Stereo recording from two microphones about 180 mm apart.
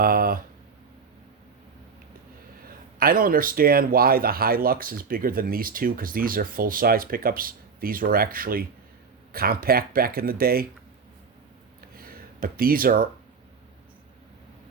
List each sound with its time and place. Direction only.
0.0 s speech: 55° right (ahead or behind)
2.6 s speech: 55° right (ahead or behind)
11.9 s a sound: 55° right (ahead or behind)